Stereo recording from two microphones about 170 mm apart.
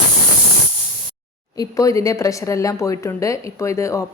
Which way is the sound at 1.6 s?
20° left (ahead or behind).